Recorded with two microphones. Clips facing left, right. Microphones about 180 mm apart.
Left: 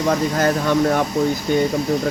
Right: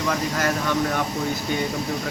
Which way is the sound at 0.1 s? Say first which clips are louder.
Left 7 dB; 35° left (ahead or behind).